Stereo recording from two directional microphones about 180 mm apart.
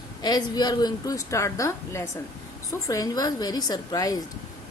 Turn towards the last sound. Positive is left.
turn(degrees=20)  # may be behind; listen again after turning